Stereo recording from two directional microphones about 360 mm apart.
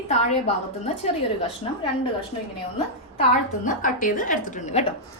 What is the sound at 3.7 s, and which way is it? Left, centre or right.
A woman's voice, left.